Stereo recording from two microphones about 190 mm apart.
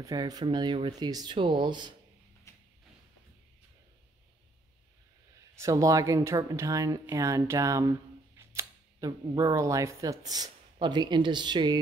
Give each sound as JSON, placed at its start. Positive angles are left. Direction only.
{"t": 0.0, "sound": "speech", "side_deg": -20}
{"t": 2.5, "sound": "a sound", "side_deg": 15}
{"t": 5.6, "sound": "speech", "side_deg": -15}